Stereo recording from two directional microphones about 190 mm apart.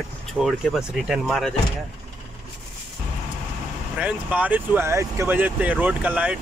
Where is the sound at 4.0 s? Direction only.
5° right (ahead or behind).